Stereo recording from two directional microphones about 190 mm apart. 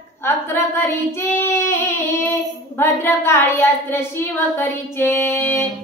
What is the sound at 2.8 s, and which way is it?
Child singing, 10° left (ahead or behind).